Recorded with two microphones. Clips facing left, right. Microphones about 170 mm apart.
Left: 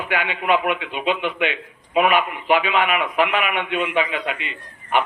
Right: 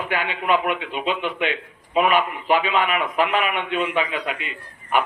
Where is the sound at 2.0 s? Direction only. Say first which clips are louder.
Left 1 dB; 40° right (ahead or behind).